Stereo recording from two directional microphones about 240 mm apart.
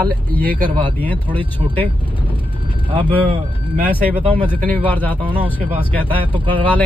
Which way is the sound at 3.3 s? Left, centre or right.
Right.